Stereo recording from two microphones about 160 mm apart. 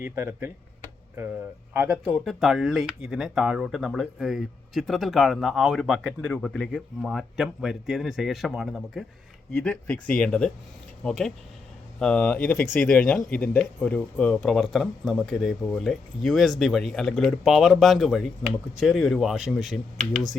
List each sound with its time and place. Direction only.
0.0 s speech: 15° right (ahead or behind)
1.7 s speech: 15° right (ahead or behind)
2.1 s speech: centre (ahead or behind)
9.5 s speech: 10° left (ahead or behind)